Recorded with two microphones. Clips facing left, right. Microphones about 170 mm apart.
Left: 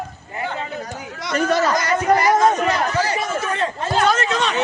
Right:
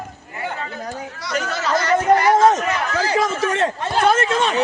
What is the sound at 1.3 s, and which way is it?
Speech, 50° left (ahead or behind).